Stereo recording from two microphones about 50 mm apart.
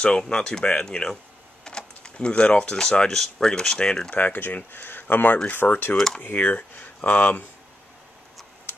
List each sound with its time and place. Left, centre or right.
0.0 s speech: centre
1.6 s a sound: centre
2.7 s speech: centre
4.1 s speech: left
5.6 s speech: left